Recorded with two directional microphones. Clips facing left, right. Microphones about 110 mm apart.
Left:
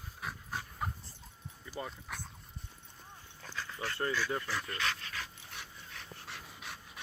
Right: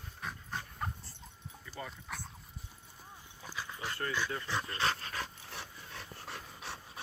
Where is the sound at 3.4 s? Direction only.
15° right (ahead or behind).